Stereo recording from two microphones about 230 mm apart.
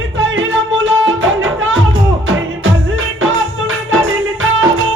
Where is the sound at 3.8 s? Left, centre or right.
Right.